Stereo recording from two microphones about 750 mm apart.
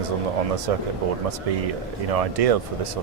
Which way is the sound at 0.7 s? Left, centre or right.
Right.